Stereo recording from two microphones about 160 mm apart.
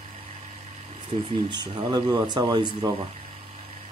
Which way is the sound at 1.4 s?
25° right (ahead or behind).